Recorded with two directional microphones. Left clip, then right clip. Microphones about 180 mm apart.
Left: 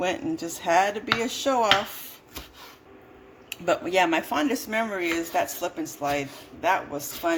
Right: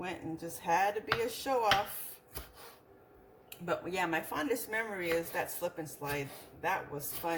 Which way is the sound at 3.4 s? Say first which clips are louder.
Left 11 dB; 55° left (ahead or behind).